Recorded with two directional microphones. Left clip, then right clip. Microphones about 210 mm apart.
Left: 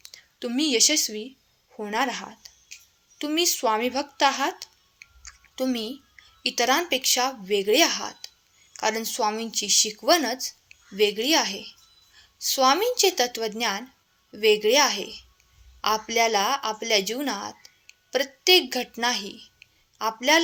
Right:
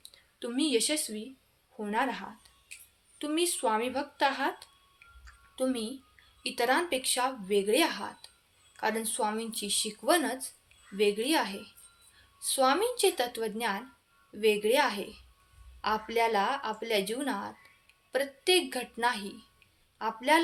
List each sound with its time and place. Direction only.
0.1 s speech: 30° left (ahead or behind)
5.2 s a sound: 30° left (ahead or behind)
6.4 s speech: 30° left (ahead or behind)